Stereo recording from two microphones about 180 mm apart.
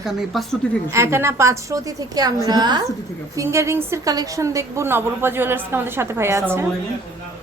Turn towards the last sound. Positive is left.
turn(degrees=-15)  # may be behind; listen again after turning